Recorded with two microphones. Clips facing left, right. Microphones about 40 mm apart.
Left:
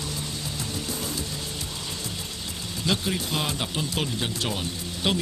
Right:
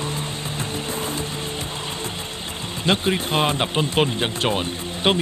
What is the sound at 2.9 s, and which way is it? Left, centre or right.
Speech, right.